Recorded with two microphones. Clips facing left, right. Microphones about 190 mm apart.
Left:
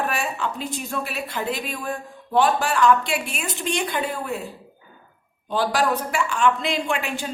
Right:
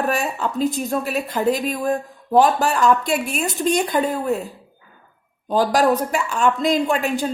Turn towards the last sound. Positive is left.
turn(degrees=-40)  # may be behind; listen again after turning